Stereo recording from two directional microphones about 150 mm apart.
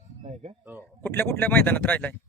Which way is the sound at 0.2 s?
45° right (ahead or behind).